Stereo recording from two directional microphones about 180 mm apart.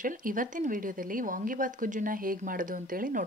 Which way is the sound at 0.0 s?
45° right (ahead or behind).